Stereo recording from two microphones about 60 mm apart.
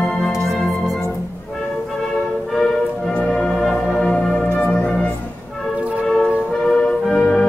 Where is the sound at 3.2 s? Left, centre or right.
Centre.